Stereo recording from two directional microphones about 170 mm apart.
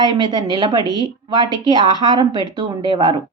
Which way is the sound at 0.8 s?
20° left (ahead or behind).